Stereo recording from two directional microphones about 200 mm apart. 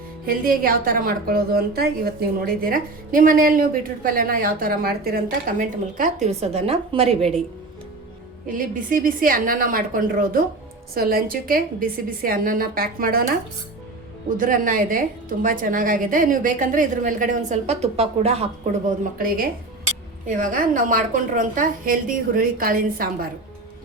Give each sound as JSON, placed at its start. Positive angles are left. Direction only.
{"t": 0.3, "sound": "a woman's voice", "side_deg": -45}
{"t": 8.4, "sound": "a woman's voice", "side_deg": -40}
{"t": 14.3, "sound": "a woman's voice", "side_deg": -40}
{"t": 18.9, "sound": "a woman's voice", "side_deg": -45}